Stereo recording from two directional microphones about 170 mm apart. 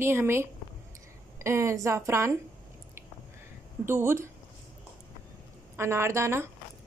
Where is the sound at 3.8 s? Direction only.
15° right (ahead or behind).